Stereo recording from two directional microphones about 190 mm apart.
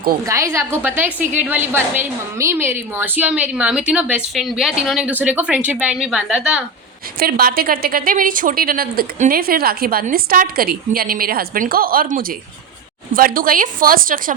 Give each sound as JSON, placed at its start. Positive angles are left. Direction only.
{"t": 0.3, "sound": "a woman's voice", "side_deg": -15}
{"t": 7.2, "sound": "a woman's voice", "side_deg": -50}